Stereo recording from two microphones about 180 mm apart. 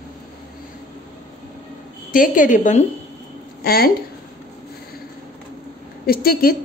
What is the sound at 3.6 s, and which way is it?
Speech, 55° left (ahead or behind).